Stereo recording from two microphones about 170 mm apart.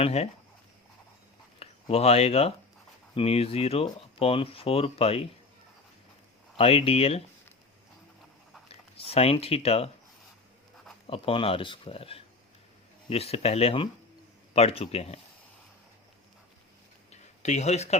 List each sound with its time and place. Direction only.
0.0 s speech: 40° left (ahead or behind)
1.5 s speech: 35° left (ahead or behind)
6.6 s speech: 35° left (ahead or behind)
9.0 s speech: 35° left (ahead or behind)
11.0 s speech: 30° left (ahead or behind)
17.1 s a sound: 40° left (ahead or behind)